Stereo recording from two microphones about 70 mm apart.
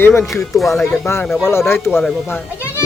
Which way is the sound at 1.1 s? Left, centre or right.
Left.